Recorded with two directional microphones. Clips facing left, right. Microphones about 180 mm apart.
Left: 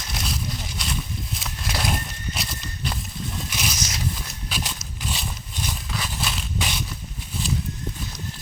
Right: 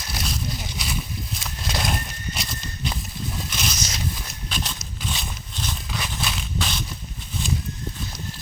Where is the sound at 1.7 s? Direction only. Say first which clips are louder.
Even; 5° left (ahead or behind).